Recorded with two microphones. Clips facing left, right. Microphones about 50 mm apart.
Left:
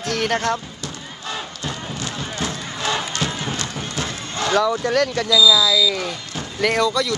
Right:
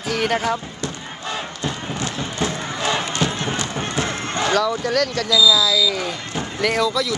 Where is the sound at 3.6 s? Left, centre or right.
Right.